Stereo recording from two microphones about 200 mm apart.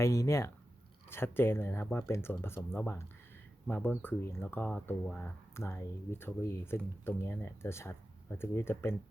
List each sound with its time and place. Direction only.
0.0 s speech: 15° left (ahead or behind)